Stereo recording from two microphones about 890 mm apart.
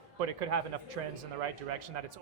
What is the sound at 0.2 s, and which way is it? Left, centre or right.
Speech, right.